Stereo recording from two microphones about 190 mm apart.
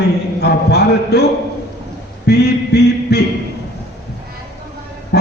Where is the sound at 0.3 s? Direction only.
60° left (ahead or behind).